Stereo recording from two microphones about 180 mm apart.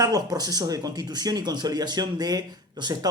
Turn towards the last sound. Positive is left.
turn(degrees=-20)  # may be behind; listen again after turning